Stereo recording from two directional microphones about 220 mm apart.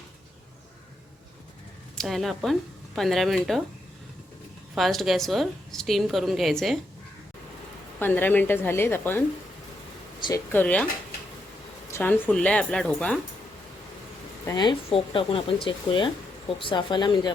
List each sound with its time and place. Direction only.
2.0 s a woman's voice: centre (ahead or behind)
4.7 s a woman's voice: centre (ahead or behind)
7.9 s a woman's voice: 10° left (ahead or behind)
10.5 s a woman's voice: 5° left (ahead or behind)
11.9 s a woman's voice: 10° left (ahead or behind)
14.4 s speech: 20° left (ahead or behind)